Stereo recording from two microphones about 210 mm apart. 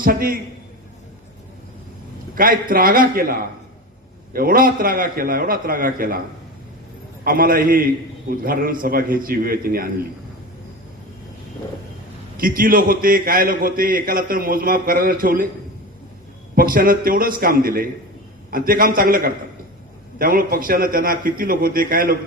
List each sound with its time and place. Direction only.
0.0 s a man's voice: 45° right (ahead or behind)
2.3 s a man's voice: 40° right (ahead or behind)
7.3 s a man's voice: 40° right (ahead or behind)
12.4 s a man's voice: 40° right (ahead or behind)
16.6 s a man's voice: 40° right (ahead or behind)